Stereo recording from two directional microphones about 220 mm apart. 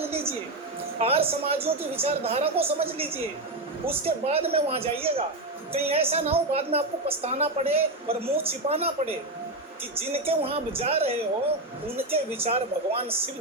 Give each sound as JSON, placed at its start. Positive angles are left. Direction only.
{"t": 0.0, "sound": "a sound", "side_deg": -25}
{"t": 0.9, "sound": "a woman's voice", "side_deg": -25}
{"t": 4.0, "sound": "a woman's voice", "side_deg": -25}